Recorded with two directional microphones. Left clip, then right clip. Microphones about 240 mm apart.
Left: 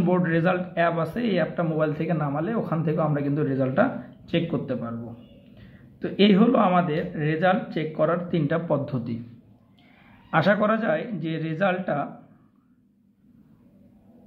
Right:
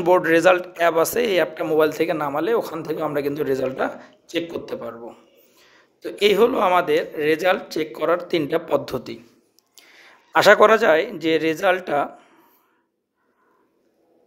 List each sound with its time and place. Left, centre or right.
0.0 s a man's voice: right
6.2 s a man's voice: right
10.3 s a man's voice: right